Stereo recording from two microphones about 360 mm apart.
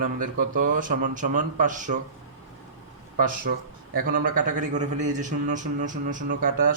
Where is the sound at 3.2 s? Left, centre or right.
Right.